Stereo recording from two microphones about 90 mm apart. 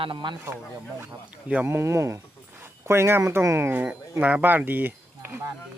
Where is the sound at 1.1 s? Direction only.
15° right (ahead or behind).